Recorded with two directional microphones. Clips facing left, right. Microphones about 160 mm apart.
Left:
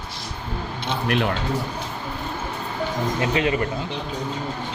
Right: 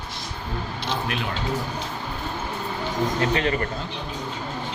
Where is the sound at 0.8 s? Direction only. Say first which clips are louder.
Left 6 dB; 60° left (ahead or behind).